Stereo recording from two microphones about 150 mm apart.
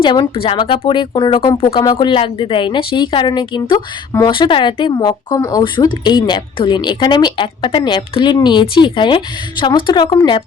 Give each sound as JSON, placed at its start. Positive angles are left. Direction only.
{"t": 0.0, "sound": "speech", "side_deg": 30}